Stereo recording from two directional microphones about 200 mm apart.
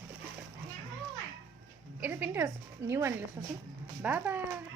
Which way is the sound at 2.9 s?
15° right (ahead or behind).